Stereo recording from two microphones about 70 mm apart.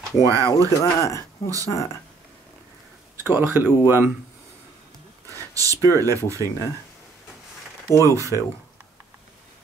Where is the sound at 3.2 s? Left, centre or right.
Right.